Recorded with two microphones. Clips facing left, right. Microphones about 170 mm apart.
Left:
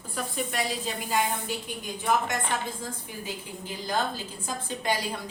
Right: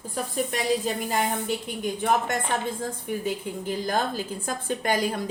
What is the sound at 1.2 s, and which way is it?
A woman's voice, 60° right (ahead or behind).